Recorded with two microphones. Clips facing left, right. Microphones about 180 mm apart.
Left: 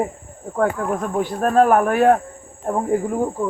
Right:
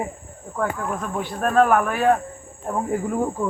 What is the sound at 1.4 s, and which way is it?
Speech, 35° left (ahead or behind).